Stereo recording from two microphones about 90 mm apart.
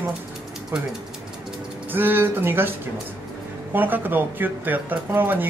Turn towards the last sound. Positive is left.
turn(degrees=-20)  # may be behind; listen again after turning